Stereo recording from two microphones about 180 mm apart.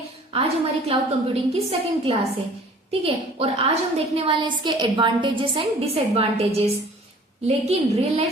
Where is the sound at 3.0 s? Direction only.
35° right (ahead or behind).